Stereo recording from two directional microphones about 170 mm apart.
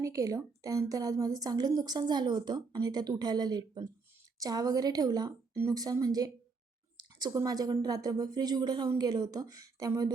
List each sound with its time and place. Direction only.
0.0 s a woman's voice: 20° right (ahead or behind)